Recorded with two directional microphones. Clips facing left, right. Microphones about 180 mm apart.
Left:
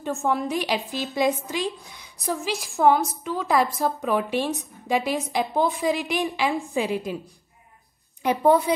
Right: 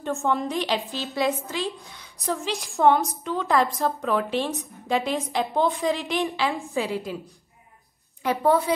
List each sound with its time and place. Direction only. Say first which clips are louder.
0.0 s a woman's voice: even; centre (ahead or behind)
8.2 s a woman's voice: left 2 dB; 15° left (ahead or behind)